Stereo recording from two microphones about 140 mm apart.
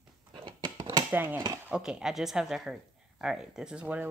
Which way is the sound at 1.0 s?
15° right (ahead or behind).